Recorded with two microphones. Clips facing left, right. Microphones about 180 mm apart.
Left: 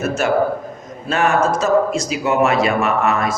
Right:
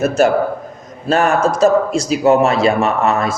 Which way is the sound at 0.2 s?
35° right (ahead or behind).